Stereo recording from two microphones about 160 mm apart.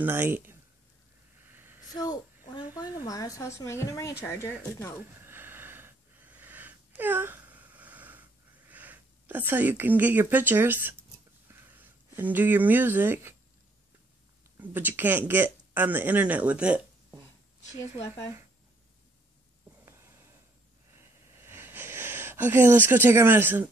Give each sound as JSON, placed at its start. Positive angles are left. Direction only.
{"t": 0.0, "sound": "speech", "side_deg": -15}
{"t": 1.4, "sound": "a sound", "side_deg": -15}
{"t": 3.1, "sound": "a woman's voice", "side_deg": 20}
{"t": 5.2, "sound": "wheeze", "side_deg": -15}
{"t": 11.5, "sound": "speech", "side_deg": -10}
{"t": 14.6, "sound": "speech", "side_deg": -10}
{"t": 18.0, "sound": "speech", "side_deg": 15}
{"t": 20.9, "sound": "a sound", "side_deg": -15}